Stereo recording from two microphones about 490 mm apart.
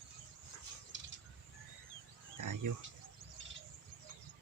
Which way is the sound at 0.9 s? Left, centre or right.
Right.